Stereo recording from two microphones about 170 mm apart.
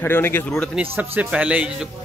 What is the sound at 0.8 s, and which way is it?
A man's voice, 10° right (ahead or behind).